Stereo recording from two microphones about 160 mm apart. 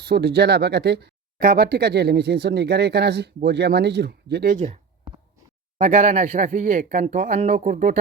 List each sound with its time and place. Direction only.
0.0 s speech: 90° right
4.5 s speech: 50° right (ahead or behind)